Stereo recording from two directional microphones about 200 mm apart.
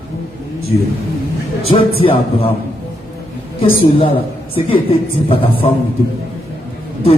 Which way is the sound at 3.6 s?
25° left (ahead or behind).